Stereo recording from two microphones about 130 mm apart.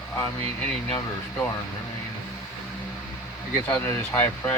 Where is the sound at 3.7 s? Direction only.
20° left (ahead or behind).